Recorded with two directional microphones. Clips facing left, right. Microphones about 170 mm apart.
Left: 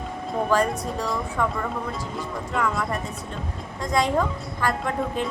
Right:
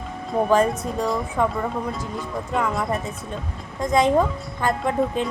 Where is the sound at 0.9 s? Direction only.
20° right (ahead or behind).